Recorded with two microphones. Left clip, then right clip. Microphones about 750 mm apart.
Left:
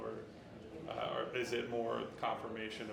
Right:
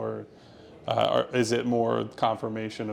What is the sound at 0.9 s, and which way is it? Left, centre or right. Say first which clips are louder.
Speech: right 15 dB; right.